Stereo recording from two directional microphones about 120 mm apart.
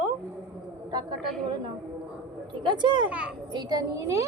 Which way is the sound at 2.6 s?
40° right (ahead or behind).